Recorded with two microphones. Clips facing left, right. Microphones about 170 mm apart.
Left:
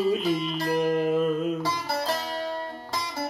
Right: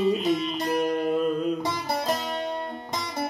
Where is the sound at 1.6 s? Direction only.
20° right (ahead or behind).